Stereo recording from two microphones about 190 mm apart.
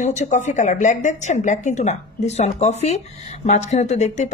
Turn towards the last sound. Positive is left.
turn(degrees=35)  # may be behind; listen again after turning